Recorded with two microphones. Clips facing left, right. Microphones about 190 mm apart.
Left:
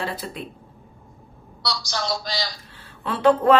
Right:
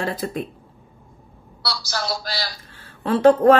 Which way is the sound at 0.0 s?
45° right (ahead or behind).